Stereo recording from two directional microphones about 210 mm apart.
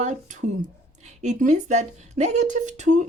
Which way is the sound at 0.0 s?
35° right (ahead or behind).